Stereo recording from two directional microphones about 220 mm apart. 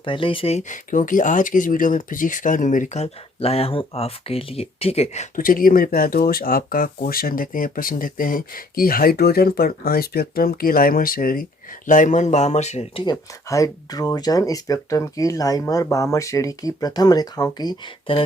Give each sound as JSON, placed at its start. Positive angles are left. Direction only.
{"t": 0.0, "sound": "speech", "side_deg": 25}